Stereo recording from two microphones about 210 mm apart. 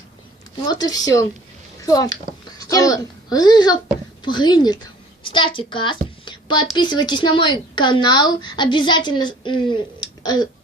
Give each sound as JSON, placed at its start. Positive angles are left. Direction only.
{"t": 0.7, "sound": "a woman's voice", "side_deg": 20}